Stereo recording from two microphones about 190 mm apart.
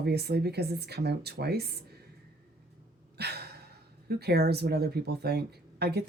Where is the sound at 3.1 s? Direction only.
60° right (ahead or behind).